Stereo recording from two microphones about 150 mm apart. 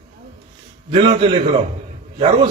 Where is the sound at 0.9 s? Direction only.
35° right (ahead or behind).